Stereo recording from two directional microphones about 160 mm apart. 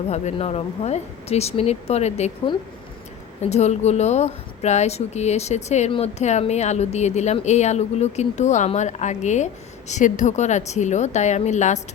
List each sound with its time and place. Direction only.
0.1 s speech: 40° left (ahead or behind)
3.4 s speech: 45° left (ahead or behind)